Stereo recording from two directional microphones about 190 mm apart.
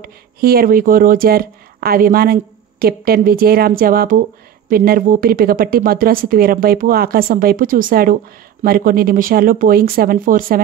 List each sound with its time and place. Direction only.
0.0 s speech: 50° right (ahead or behind)